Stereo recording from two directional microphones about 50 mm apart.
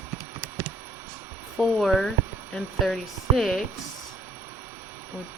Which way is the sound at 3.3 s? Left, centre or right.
Centre.